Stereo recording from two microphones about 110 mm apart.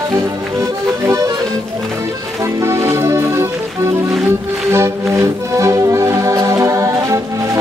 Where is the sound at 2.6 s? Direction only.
25° right (ahead or behind).